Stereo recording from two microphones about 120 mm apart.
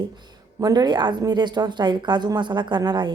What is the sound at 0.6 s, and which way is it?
A woman's voice, 35° right (ahead or behind).